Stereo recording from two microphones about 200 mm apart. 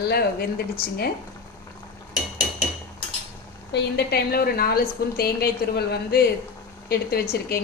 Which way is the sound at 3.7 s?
55° left (ahead or behind).